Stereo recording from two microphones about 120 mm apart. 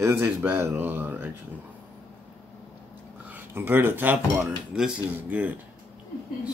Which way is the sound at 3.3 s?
15° right (ahead or behind).